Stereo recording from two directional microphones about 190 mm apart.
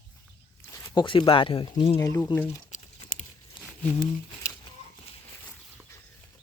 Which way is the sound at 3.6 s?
25° left (ahead or behind).